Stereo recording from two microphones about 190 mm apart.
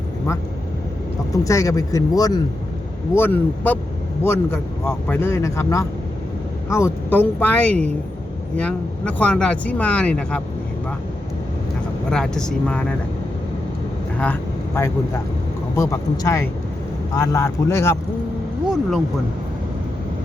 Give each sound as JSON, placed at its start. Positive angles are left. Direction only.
{"t": 1.3, "sound": "speech", "side_deg": 15}
{"t": 12.1, "sound": "speech", "side_deg": 5}
{"t": 14.8, "sound": "speech", "side_deg": 15}
{"t": 18.7, "sound": "speech", "side_deg": 0}